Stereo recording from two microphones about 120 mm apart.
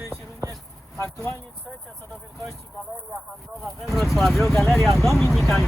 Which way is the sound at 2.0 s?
Centre (ahead or behind).